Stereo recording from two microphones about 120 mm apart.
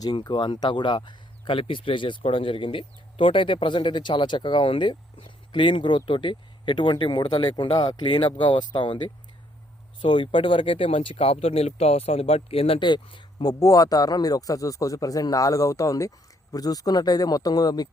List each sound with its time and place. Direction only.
0.0 s speech: 35° left (ahead or behind)